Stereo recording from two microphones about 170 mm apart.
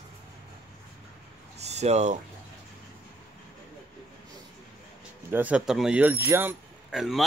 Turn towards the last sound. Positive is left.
turn(degrees=0)  # may be behind; listen again after turning